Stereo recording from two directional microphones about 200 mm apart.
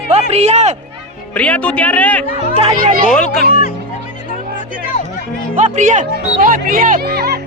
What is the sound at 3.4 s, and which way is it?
Music, 45° left (ahead or behind).